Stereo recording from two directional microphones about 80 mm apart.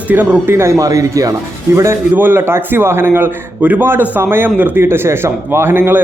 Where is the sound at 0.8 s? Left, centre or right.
Right.